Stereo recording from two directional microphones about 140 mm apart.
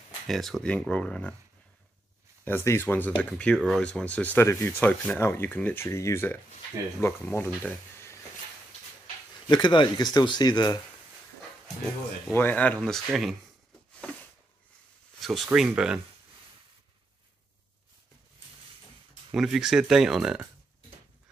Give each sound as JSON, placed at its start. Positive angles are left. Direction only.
{"t": 0.3, "sound": "speech", "side_deg": 0}
{"t": 2.4, "sound": "speech", "side_deg": 15}
{"t": 9.5, "sound": "speech", "side_deg": 30}
{"t": 12.3, "sound": "speech", "side_deg": 15}
{"t": 15.1, "sound": "speech", "side_deg": 0}
{"t": 19.3, "sound": "speech", "side_deg": -5}